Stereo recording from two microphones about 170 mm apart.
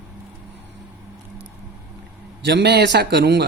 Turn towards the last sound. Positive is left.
turn(degrees=-75)  # may be behind; listen again after turning